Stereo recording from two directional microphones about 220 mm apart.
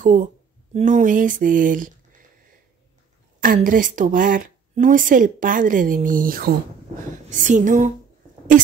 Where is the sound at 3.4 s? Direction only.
40° right (ahead or behind).